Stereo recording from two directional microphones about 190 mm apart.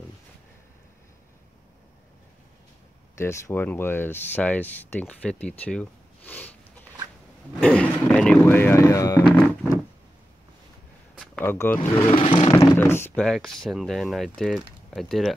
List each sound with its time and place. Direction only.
3.2 s speech: 15° left (ahead or behind)
11.4 s speech: 10° left (ahead or behind)
12.1 s a sound: 30° left (ahead or behind)
12.5 s speech: 15° left (ahead or behind)